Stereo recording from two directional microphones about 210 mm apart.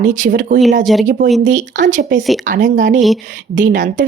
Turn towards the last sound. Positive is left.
turn(degrees=-40)  # may be behind; listen again after turning